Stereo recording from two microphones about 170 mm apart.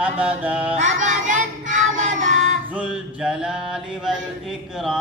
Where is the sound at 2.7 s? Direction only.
5° right (ahead or behind).